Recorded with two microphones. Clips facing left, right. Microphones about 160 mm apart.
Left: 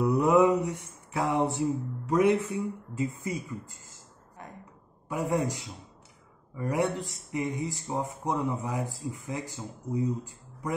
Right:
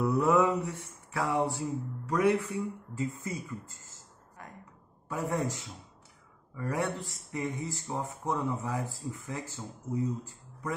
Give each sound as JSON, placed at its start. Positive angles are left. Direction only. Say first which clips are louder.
{"t": 0.0, "sound": "mantra", "louder": "left 3 dB", "side_deg": 15}
{"t": 2.9, "sound": "speech", "louder": "left 3 dB", "side_deg": 15}
{"t": 4.4, "sound": "a sound", "louder": "left 3 dB", "side_deg": 20}
{"t": 5.0, "sound": "a man's voice", "louder": "left 3 dB", "side_deg": 15}